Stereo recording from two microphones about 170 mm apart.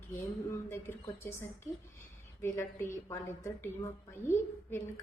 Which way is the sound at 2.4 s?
15° left (ahead or behind).